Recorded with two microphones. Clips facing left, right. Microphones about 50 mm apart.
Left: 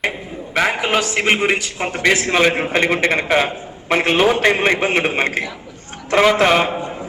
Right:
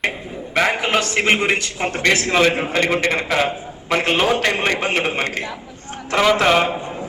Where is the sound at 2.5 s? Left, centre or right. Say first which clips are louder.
Left 1 dB; left.